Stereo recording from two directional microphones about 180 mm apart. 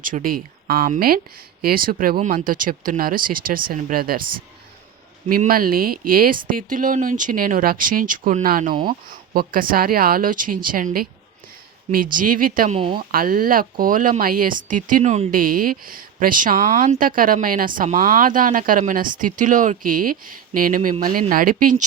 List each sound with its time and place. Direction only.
0.0 s speech: 50° right (ahead or behind)
5.3 s speech: 55° right (ahead or behind)
12.1 s speech: 50° right (ahead or behind)
12.7 s speech: 30° right (ahead or behind)
13.0 s speech: 55° right (ahead or behind)